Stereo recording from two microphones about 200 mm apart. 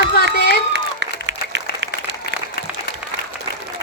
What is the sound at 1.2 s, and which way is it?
Applause, 65° right (ahead or behind).